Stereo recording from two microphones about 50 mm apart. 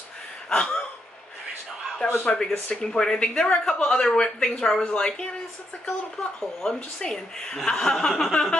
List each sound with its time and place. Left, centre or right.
0.5 s a sound: left
2.0 s speech: left
2.3 s speech: centre
6.6 s speech: centre